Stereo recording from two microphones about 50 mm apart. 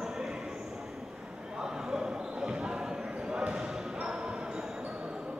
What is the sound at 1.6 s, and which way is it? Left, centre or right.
Basketball bounce, centre.